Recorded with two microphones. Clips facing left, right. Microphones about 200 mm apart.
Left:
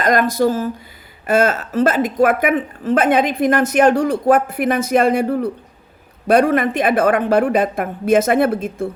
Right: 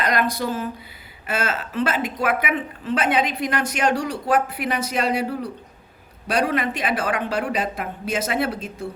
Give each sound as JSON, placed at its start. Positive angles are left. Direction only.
{"t": 0.0, "sound": "a woman's voice", "side_deg": 45}